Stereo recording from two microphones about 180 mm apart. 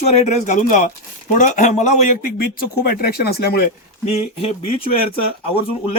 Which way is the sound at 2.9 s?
60° left (ahead or behind).